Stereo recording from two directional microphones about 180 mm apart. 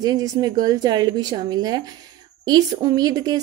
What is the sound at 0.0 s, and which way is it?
Speech, 20° right (ahead or behind).